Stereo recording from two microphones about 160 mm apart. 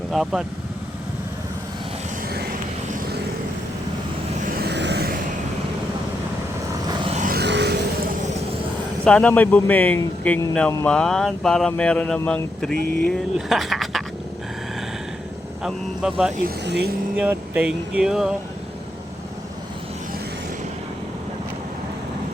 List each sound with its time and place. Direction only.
0.1 s speech: 5° right (ahead or behind)
4.5 s vehicle: 85° right
7.3 s music: 85° right
9.0 s speech: 10° left (ahead or behind)
15.6 s speech: 5° right (ahead or behind)
16.4 s speech: 90° right
17.2 s speech: 10° right (ahead or behind)